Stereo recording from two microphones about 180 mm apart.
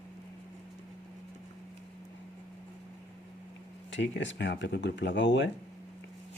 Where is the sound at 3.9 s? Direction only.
90° left.